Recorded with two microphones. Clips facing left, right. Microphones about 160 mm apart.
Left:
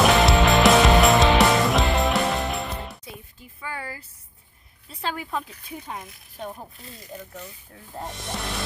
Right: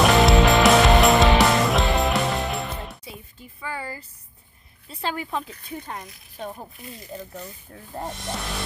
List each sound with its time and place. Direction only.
0.0 s music: centre (ahead or behind)
3.6 s a sound: centre (ahead or behind)
4.9 s speech: centre (ahead or behind)
7.1 s speech: 30° right (ahead or behind)